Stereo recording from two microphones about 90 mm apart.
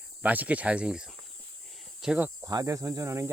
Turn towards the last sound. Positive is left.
turn(degrees=-30)  # may be behind; listen again after turning